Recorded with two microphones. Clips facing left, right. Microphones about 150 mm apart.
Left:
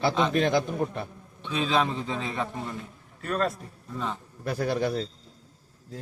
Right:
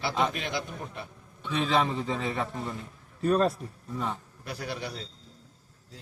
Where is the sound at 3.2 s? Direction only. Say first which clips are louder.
Right 4 dB; 30° right (ahead or behind).